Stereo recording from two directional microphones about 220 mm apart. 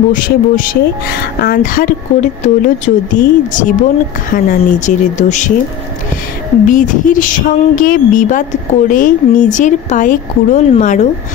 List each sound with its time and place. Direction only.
0.1 s speech: 40° left (ahead or behind)
6.7 s speech: 35° left (ahead or behind)